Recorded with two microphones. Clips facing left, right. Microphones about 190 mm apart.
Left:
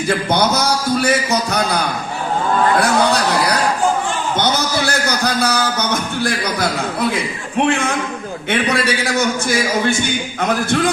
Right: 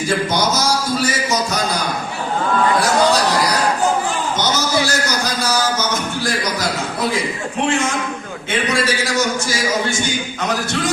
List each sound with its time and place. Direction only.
0.3 s a man's voice: 60° left (ahead or behind)
4.4 s a sound: 60° left (ahead or behind)
7.7 s a man's voice: 60° left (ahead or behind)